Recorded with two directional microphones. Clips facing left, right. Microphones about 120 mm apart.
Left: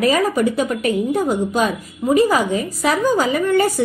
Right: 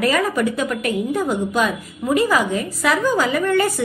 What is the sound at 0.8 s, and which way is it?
Speech, 35° left (ahead or behind).